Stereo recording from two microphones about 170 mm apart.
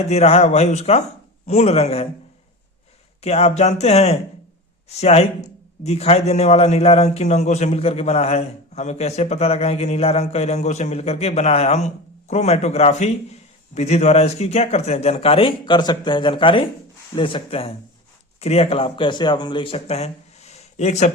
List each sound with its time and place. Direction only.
0.1 s a man's voice: 35° left (ahead or behind)
3.2 s a man's voice: 40° left (ahead or behind)